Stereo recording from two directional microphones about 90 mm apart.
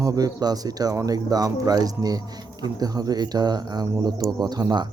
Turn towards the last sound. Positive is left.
turn(degrees=-50)  # may be behind; listen again after turning